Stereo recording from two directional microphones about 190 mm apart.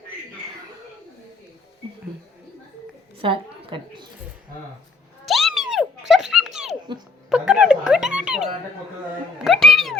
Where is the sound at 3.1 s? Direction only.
25° right (ahead or behind).